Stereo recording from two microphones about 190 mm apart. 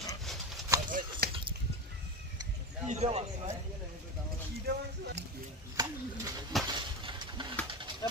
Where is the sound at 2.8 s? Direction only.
35° right (ahead or behind).